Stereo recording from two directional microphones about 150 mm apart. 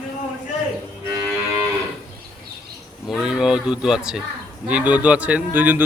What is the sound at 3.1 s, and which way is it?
Speech, 5° right (ahead or behind).